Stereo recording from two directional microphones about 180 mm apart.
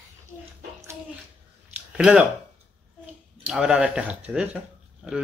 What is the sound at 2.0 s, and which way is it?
Speech, 5° right (ahead or behind).